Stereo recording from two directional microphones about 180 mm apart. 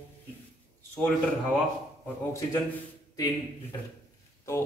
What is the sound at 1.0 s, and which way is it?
Speech, 10° left (ahead or behind).